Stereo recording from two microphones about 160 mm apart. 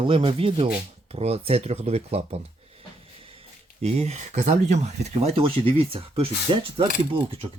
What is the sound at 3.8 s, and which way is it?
Speech, 40° right (ahead or behind).